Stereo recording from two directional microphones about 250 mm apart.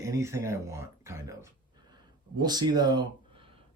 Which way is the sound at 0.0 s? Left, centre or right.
Centre.